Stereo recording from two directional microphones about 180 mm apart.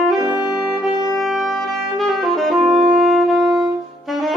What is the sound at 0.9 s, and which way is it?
Music, 20° left (ahead or behind).